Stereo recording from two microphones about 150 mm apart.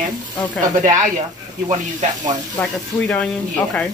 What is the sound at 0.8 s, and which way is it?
Speech, 55° right (ahead or behind).